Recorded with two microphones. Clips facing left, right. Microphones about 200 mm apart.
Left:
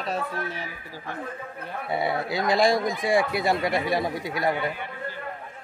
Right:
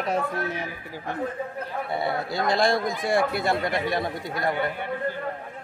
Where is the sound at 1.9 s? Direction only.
Centre (ahead or behind).